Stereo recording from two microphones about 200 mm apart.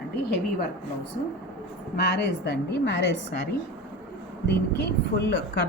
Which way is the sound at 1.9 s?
55° left (ahead or behind).